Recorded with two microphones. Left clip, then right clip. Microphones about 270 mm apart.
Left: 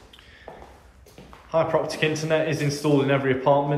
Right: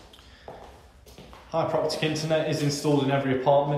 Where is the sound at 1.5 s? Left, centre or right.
Centre.